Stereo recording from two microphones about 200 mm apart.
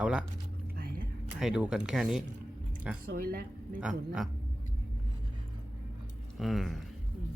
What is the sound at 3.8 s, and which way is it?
Speech, 5° right (ahead or behind).